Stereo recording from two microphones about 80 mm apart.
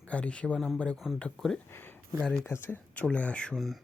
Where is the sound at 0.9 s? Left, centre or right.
Centre.